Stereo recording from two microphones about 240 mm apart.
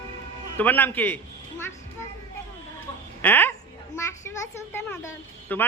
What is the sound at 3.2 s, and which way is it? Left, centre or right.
Speech, centre.